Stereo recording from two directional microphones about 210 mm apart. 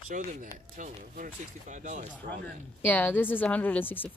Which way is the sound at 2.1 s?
10° left (ahead or behind).